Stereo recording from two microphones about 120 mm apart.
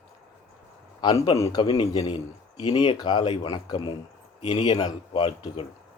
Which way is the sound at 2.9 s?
40° left (ahead or behind).